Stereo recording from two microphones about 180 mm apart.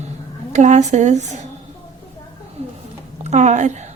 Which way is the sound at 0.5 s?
40° right (ahead or behind).